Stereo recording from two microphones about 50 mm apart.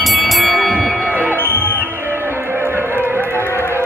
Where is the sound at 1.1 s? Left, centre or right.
Right.